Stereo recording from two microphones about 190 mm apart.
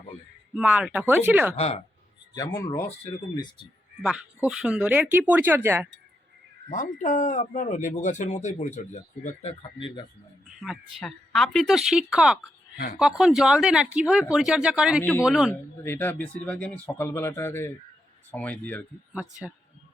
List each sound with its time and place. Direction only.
0.5 s speech: 10° right (ahead or behind)
1.5 s speech: 35° left (ahead or behind)
2.3 s speech: 20° left (ahead or behind)
4.0 s speech: 5° right (ahead or behind)
6.7 s speech: 40° left (ahead or behind)
10.6 s speech: centre (ahead or behind)
12.7 s speech: 55° left (ahead or behind)
13.0 s speech: 5° right (ahead or behind)
15.8 s speech: 10° left (ahead or behind)